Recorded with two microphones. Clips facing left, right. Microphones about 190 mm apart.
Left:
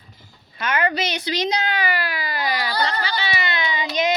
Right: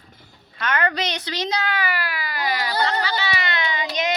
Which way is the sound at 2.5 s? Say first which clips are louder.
Right 2 dB; 20° right (ahead or behind).